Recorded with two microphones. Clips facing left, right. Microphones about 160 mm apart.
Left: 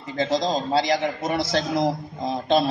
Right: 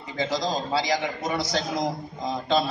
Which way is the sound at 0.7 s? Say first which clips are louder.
Left 5 dB; 55° left (ahead or behind).